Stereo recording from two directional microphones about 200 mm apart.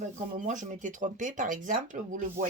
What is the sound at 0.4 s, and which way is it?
Speech, 40° right (ahead or behind).